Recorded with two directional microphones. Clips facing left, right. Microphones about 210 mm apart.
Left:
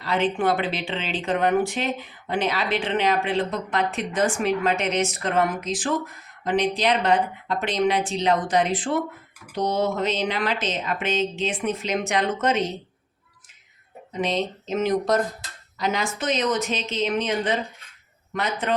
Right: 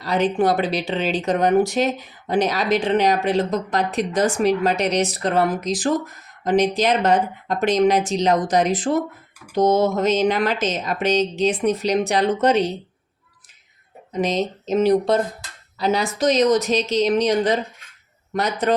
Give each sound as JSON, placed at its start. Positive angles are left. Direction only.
{"t": 0.0, "sound": "speech", "side_deg": -40}
{"t": 14.1, "sound": "speech", "side_deg": -40}